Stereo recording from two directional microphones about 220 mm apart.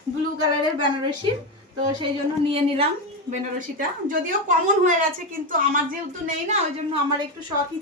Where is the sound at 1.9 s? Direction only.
20° right (ahead or behind).